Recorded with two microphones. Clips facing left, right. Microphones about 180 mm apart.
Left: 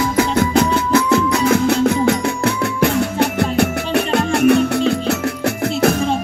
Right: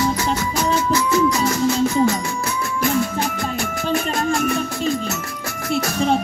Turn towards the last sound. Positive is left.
turn(degrees=65)  # may be behind; listen again after turning